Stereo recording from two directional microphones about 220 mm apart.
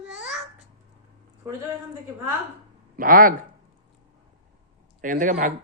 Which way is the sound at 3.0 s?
40° right (ahead or behind).